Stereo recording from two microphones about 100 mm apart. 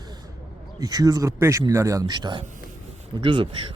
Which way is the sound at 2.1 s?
50° right (ahead or behind).